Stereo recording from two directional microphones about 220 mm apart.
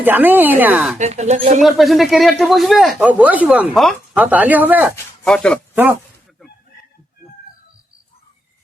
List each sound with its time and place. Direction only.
0.0 s speech: 10° right (ahead or behind)
0.9 s speech: 30° right (ahead or behind)
1.6 s speech: centre (ahead or behind)
5.2 s speech: 5° left (ahead or behind)
5.7 s speech: 10° right (ahead or behind)